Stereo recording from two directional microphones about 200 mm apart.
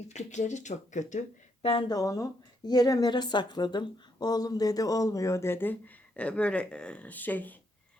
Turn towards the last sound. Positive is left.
turn(degrees=10)  # may be behind; listen again after turning